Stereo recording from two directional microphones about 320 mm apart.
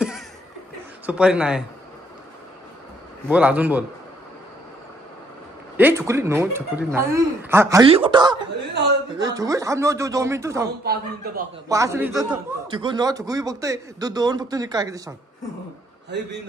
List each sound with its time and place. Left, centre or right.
1.0 s speech: centre
3.3 s speech: centre
5.8 s a man's voice: centre
10.8 s speech: right
11.7 s a man's voice: centre
16.1 s a man's voice: right